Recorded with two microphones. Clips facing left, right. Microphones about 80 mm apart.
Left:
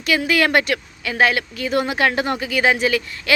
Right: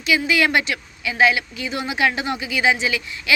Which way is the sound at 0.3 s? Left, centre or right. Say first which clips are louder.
Left 2 dB; left.